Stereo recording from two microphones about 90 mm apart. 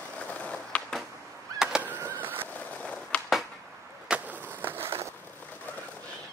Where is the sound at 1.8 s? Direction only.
30° right (ahead or behind).